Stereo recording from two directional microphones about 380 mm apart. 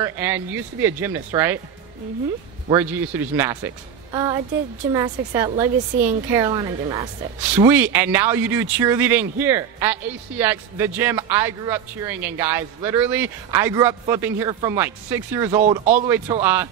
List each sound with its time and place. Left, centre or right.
0.0 s a woman's voice: centre
2.7 s a woman's voice: centre
15.6 s a woman's voice: centre
15.9 s a woman's voice: centre